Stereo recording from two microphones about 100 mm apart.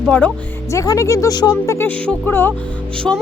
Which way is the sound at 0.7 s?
35° left (ahead or behind).